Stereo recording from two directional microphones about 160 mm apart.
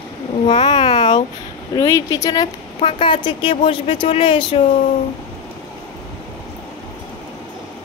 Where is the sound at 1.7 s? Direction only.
20° left (ahead or behind).